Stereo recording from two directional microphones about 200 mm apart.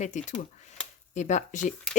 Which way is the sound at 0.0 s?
35° left (ahead or behind).